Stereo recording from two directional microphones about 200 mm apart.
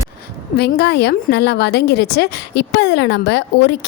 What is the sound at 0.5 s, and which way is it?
A woman's voice, 55° left (ahead or behind).